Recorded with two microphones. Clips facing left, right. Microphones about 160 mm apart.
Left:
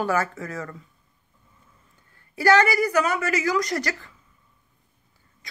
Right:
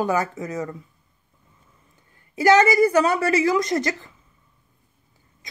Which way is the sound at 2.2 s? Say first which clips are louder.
Right 3 dB; 20° right (ahead or behind).